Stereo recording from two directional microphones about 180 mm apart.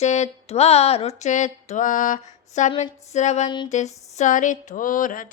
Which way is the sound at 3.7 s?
40° left (ahead or behind).